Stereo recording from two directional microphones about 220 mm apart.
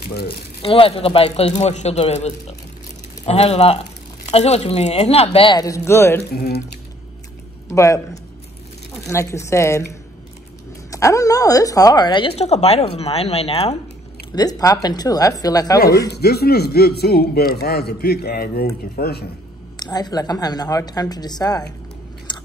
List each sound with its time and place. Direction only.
0.6 s a woman's voice: 25° left (ahead or behind)
6.3 s speech: 45° left (ahead or behind)
7.7 s a woman's voice: 15° left (ahead or behind)
10.9 s a woman's voice: 15° left (ahead or behind)
14.3 s a woman's voice: 15° left (ahead or behind)
16.1 s speech: 45° left (ahead or behind)
19.8 s a woman's voice: 20° left (ahead or behind)
22.3 s biting: 20° left (ahead or behind)